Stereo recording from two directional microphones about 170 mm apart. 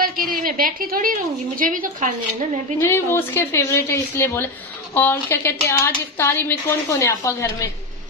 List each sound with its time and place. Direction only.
0.0 s a woman's voice: 60° right (ahead or behind)
2.8 s a woman's voice: 15° left (ahead or behind)